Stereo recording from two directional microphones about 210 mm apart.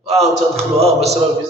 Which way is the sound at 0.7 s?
30° right (ahead or behind).